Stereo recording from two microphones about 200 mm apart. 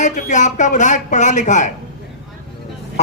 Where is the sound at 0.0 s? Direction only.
40° left (ahead or behind).